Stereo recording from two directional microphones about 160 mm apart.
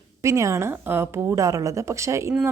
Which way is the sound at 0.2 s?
20° right (ahead or behind).